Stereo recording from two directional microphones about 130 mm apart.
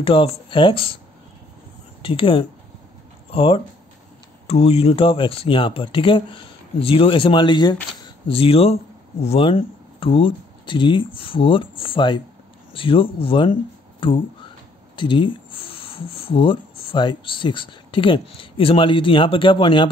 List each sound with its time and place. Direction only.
0.0 s speech: 45° left (ahead or behind)
2.0 s speech: 45° left (ahead or behind)
8.3 s speech: 50° left (ahead or behind)